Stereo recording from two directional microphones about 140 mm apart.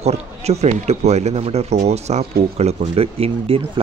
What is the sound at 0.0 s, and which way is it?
Speech, 50° right (ahead or behind).